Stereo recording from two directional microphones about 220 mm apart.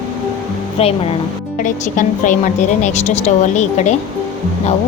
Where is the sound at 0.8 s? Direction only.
25° left (ahead or behind).